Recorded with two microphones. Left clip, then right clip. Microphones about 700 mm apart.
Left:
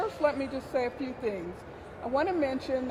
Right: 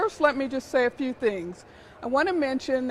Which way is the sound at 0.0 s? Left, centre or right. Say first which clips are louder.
Right 5 dB; right.